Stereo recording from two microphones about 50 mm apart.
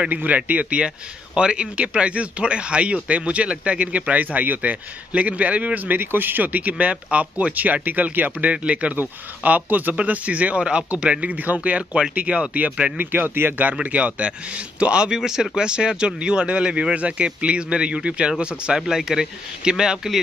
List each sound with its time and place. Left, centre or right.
0.1 s speech: right
5.9 s speech: right
12.9 s speech: right
13.9 s speech: right